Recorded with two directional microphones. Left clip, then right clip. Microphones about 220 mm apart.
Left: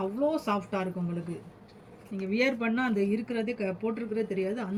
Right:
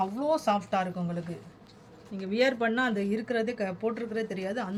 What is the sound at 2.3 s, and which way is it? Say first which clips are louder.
Speech: right 2 dB; 40° right (ahead or behind).